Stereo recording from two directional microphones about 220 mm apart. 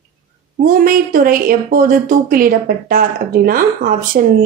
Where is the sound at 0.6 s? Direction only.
40° right (ahead or behind).